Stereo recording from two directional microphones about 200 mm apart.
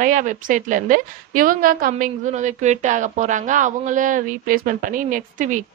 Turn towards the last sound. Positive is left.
turn(degrees=-40)  # may be behind; listen again after turning